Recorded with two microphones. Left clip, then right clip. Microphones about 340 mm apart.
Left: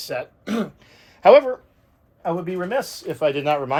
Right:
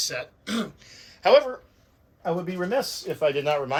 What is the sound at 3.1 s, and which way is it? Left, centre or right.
Speech, left.